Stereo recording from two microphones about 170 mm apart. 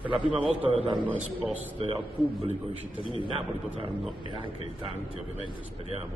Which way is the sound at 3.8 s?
30° right (ahead or behind).